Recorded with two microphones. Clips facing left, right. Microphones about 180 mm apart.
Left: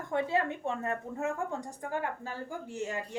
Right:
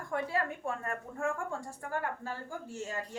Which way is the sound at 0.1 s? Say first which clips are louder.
Left 4 dB; 20° left (ahead or behind).